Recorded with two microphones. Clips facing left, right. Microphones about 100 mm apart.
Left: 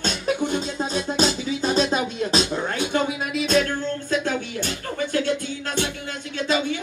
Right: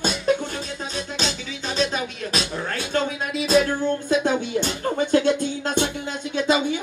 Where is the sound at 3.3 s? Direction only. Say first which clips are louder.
Right 3 dB; centre (ahead or behind).